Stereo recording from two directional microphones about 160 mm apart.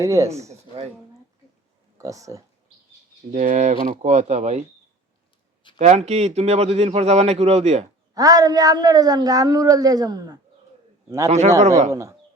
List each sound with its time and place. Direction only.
0.0 s speech: 20° right (ahead or behind)
2.0 s speech: 20° right (ahead or behind)
3.3 s speech: 55° right (ahead or behind)
5.7 s speech: 45° right (ahead or behind)
8.1 s speech: 20° right (ahead or behind)
11.3 s speech: 45° right (ahead or behind)
11.9 s speech: 20° right (ahead or behind)